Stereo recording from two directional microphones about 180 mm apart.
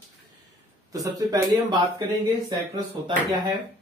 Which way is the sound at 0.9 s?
20° right (ahead or behind).